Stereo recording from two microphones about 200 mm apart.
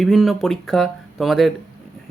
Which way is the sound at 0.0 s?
Centre (ahead or behind).